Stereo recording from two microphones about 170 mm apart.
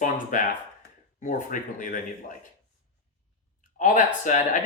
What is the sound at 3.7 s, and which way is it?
Speech, 50° left (ahead or behind).